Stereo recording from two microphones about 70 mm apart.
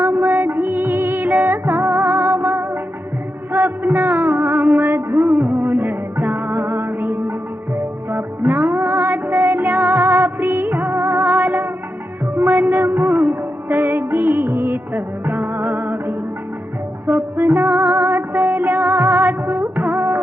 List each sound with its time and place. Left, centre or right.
0.0 s music: right
8.5 s music: right
11.2 s music: right
17.3 s music: right
17.6 s music: right
19.5 s music of bollywood: right